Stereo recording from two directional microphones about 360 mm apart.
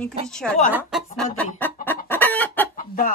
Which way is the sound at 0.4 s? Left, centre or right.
Centre.